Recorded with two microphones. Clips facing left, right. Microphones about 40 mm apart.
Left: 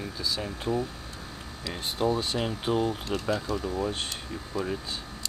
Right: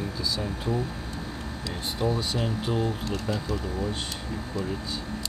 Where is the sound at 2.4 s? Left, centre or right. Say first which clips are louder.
Even; left.